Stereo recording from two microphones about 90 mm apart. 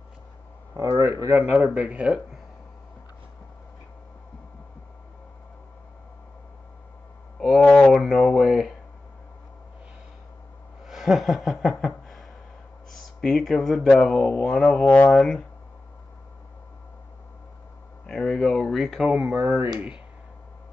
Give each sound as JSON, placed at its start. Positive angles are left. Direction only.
{"t": 0.7, "sound": "speech", "side_deg": -45}
{"t": 1.3, "sound": "speech", "side_deg": -20}
{"t": 7.3, "sound": "a sound", "side_deg": 0}
{"t": 10.9, "sound": "chuckle", "side_deg": -5}
{"t": 11.7, "sound": "a sound", "side_deg": 5}
{"t": 12.9, "sound": "speech", "side_deg": 5}
{"t": 18.0, "sound": "speech", "side_deg": 5}
{"t": 19.0, "sound": "speech", "side_deg": -20}